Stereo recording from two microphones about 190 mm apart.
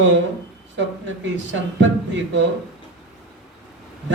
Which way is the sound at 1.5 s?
75° right (ahead or behind).